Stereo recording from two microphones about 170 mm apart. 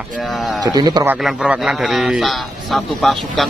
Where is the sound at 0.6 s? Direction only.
25° right (ahead or behind).